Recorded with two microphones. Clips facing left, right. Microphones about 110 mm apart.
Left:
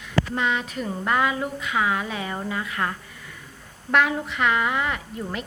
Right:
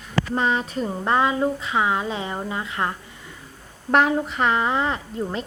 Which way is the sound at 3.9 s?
35° right (ahead or behind).